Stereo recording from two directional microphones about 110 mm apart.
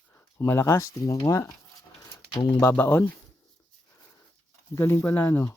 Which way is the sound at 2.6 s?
20° left (ahead or behind).